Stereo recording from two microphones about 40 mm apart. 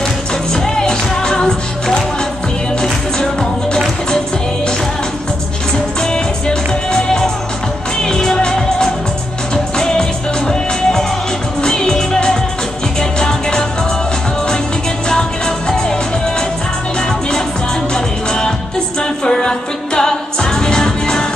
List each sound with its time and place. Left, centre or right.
0.5 s music: centre
5.9 s music: centre
15.0 s music: centre
17.9 s music: centre